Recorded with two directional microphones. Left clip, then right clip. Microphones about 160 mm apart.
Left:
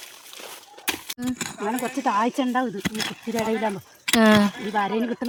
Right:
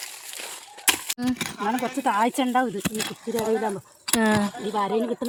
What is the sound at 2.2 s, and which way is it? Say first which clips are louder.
Speech: right 1 dB; 20° right (ahead or behind).